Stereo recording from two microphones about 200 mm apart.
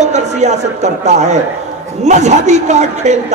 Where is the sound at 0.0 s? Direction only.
35° right (ahead or behind).